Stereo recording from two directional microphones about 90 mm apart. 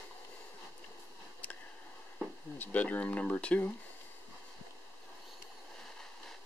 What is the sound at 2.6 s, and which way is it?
Speech, 15° left (ahead or behind).